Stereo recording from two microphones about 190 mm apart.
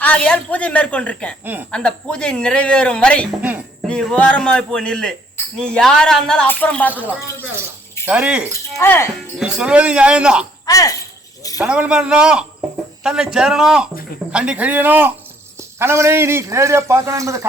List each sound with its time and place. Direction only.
0.0 s a woman's voice: 5° left (ahead or behind)
3.4 s a sound: 10° right (ahead or behind)
3.8 s speech: 5° left (ahead or behind)
6.9 s a man's voice: 10° right (ahead or behind)
8.8 s a woman's voice: 15° left (ahead or behind)
9.4 s speech: 5° right (ahead or behind)
10.7 s a woman's voice: 20° left (ahead or behind)
11.5 s a man's voice: 5° right (ahead or behind)